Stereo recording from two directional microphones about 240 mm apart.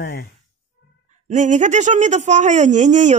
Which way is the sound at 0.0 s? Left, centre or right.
Left.